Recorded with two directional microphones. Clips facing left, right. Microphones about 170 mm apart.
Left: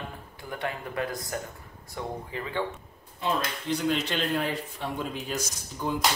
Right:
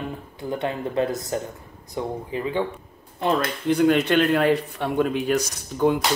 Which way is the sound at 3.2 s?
55° right (ahead or behind).